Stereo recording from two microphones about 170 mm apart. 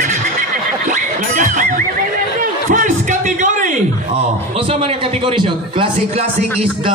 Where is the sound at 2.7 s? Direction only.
50° right (ahead or behind).